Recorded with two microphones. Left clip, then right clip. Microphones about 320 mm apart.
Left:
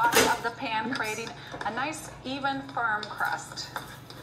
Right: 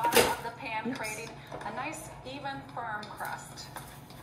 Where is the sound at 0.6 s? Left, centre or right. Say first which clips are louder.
Left 6 dB; left.